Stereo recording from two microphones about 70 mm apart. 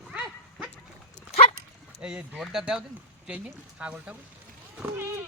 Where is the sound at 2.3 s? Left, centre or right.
Centre.